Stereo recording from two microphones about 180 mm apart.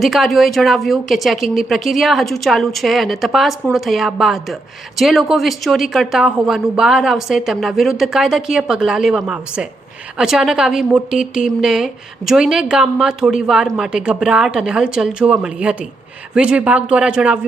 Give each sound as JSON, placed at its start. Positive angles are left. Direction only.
{"t": 0.0, "sound": "speech", "side_deg": 0}